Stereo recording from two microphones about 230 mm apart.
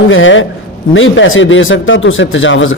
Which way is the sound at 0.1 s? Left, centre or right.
Left.